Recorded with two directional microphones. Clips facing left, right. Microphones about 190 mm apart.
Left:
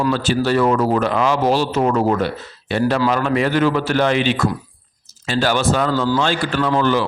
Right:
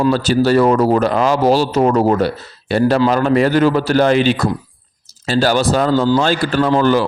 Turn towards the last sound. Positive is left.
turn(degrees=-40)  # may be behind; listen again after turning